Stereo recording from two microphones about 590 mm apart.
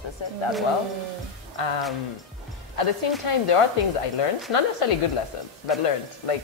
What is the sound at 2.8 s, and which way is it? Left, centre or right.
Speech, left.